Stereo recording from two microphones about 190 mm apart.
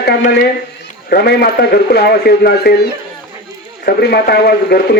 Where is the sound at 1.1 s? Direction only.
55° left (ahead or behind).